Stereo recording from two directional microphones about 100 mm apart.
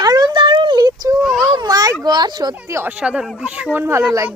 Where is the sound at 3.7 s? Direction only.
25° right (ahead or behind).